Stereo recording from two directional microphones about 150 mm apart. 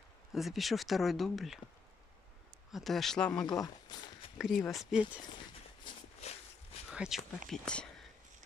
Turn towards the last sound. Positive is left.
turn(degrees=5)  # may be behind; listen again after turning